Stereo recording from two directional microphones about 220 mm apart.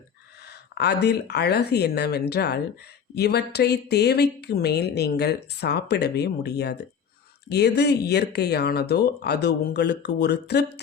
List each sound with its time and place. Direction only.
0.4 s speech: 50° left (ahead or behind)